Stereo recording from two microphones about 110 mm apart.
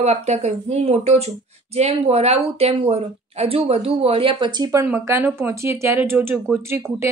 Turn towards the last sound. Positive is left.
turn(degrees=-25)  # may be behind; listen again after turning